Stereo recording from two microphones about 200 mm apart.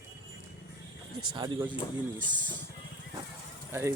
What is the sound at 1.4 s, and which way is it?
Speech, 25° right (ahead or behind).